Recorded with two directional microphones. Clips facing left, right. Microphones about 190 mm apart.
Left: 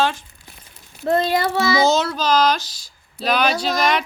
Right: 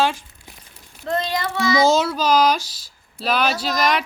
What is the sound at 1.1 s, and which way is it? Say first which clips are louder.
Child singing: left 5 dB; 35° left (ahead or behind).